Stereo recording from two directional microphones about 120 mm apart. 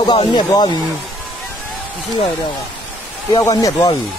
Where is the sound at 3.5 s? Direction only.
35° left (ahead or behind).